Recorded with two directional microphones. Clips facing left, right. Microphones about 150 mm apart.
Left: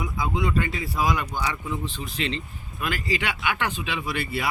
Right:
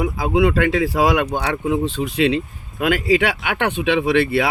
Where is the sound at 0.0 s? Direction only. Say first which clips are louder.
Right 10 dB; 70° right (ahead or behind).